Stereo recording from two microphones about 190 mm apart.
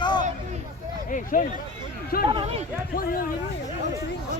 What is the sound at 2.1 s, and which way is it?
Speech, 55° left (ahead or behind).